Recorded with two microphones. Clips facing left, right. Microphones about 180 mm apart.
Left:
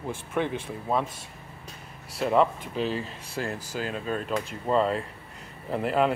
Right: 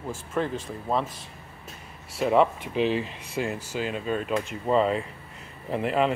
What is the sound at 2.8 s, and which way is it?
Speech, 40° left (ahead or behind).